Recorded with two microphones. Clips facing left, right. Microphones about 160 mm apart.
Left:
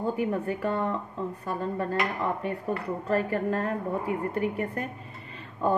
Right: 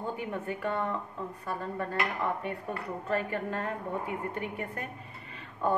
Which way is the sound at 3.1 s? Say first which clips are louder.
Left 5 dB; 35° left (ahead or behind).